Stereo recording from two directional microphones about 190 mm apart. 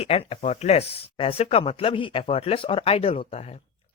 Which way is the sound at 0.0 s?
30° left (ahead or behind).